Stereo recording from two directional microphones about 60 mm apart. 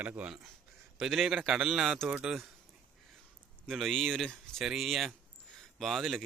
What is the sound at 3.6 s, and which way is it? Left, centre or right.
Speech, centre.